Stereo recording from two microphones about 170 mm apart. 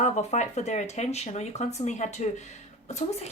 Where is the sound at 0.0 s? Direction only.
40° left (ahead or behind).